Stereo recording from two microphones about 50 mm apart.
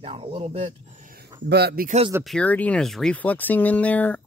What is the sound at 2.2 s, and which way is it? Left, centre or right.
Speech, right.